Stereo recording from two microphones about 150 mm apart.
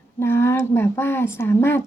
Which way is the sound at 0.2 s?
15° left (ahead or behind).